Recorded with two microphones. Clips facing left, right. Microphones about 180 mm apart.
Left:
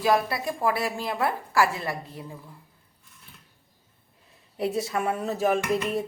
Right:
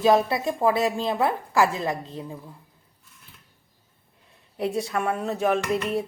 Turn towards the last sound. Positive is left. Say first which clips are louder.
# right 1 dB
turn(degrees=0)  # may be behind; listen again after turning